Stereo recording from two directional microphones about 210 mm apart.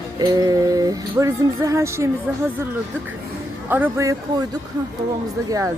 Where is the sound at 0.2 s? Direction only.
15° right (ahead or behind).